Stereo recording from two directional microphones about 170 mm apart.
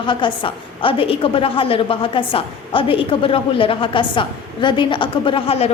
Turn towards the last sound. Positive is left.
turn(degrees=35)  # may be behind; listen again after turning